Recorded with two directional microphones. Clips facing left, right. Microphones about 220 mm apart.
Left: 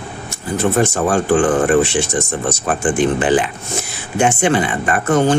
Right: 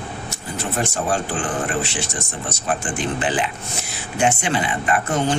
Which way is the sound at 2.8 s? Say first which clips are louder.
Left 9 dB; 50° left (ahead or behind).